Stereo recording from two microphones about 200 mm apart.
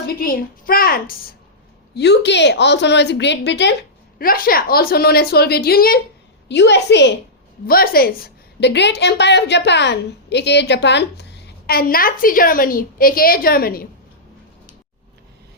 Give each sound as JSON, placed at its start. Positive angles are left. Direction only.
{"t": 0.1, "sound": "a woman's voice", "side_deg": 45}
{"t": 2.0, "sound": "a woman's voice", "side_deg": 60}
{"t": 4.2, "sound": "a woman's voice", "side_deg": 45}
{"t": 7.7, "sound": "a woman's voice", "side_deg": 50}